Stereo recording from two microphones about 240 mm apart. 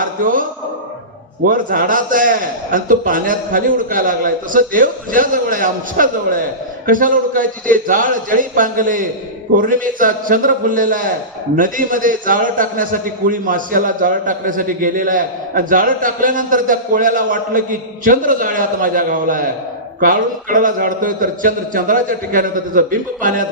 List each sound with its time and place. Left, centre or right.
0.0 s music: right
1.5 s a man's voice: right